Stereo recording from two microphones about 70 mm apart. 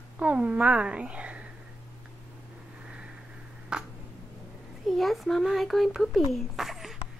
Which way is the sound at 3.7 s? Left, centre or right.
Centre.